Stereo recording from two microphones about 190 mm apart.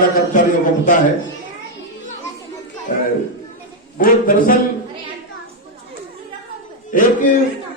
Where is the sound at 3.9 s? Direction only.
45° left (ahead or behind).